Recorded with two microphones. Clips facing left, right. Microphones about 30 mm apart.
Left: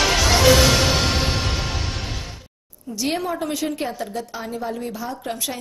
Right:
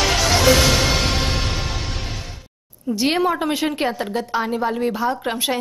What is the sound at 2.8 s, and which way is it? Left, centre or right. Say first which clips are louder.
A woman's voice: right 6 dB; right.